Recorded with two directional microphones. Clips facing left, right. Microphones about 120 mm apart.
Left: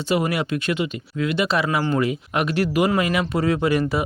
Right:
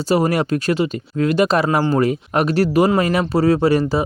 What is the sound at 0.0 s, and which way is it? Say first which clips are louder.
Speech: right 5 dB; 40° right (ahead or behind).